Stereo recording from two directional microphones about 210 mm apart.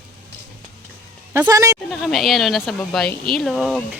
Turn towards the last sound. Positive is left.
turn(degrees=-5)  # may be behind; listen again after turning